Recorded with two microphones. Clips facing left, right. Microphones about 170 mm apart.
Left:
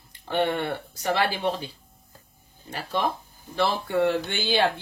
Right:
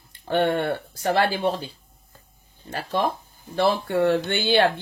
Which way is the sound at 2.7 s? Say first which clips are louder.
Right 2 dB; 45° right (ahead or behind).